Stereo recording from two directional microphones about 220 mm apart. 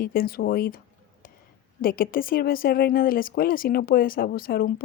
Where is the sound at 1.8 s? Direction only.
40° left (ahead or behind).